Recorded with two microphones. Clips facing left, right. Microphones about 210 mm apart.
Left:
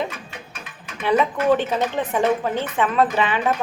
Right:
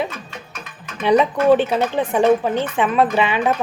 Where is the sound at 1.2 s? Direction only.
15° right (ahead or behind).